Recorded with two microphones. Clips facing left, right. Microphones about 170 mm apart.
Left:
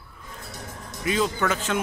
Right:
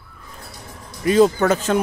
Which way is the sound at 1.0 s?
45° right (ahead or behind).